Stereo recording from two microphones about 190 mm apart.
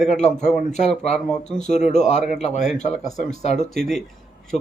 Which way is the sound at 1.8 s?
40° left (ahead or behind).